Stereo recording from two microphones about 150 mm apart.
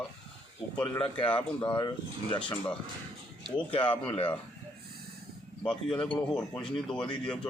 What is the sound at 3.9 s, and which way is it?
Speech, 35° left (ahead or behind).